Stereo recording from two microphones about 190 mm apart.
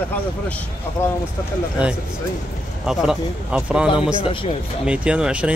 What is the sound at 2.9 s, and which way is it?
Speech, 5° right (ahead or behind).